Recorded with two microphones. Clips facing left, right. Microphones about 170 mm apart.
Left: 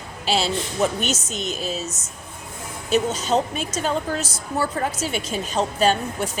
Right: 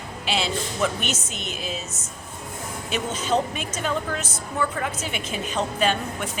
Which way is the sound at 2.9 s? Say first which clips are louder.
Left 4 dB; 40° left (ahead or behind).